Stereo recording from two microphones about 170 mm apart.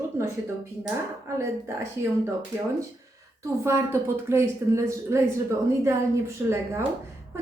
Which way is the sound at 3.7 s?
15° right (ahead or behind).